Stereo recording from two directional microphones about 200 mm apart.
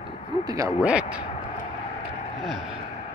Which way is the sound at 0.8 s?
5° right (ahead or behind).